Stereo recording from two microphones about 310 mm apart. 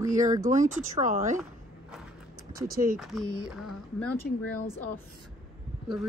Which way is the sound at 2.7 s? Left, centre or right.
Right.